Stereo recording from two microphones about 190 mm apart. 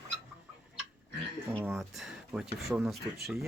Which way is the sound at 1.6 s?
Centre (ahead or behind).